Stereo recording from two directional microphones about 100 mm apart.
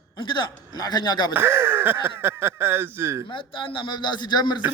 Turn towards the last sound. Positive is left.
turn(degrees=50)  # may be behind; listen again after turning